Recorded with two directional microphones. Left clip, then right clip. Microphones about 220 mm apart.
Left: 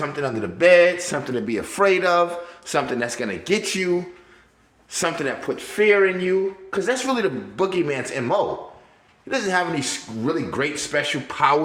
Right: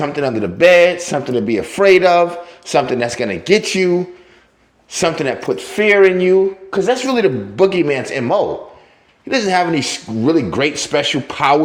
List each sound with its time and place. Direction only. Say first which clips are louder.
0.0 s a man's voice: right 7 dB; 25° right (ahead or behind)
4.9 s a man's voice: right 7 dB; 20° right (ahead or behind)